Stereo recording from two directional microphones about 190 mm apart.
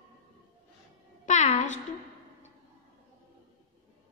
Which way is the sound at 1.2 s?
40° left (ahead or behind).